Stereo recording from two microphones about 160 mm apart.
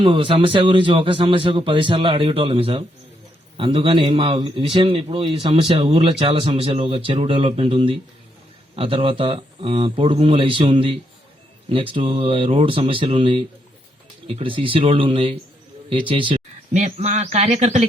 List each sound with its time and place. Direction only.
0.0 s a man's voice: 30° right (ahead or behind)
16.7 s a man's voice: 45° right (ahead or behind)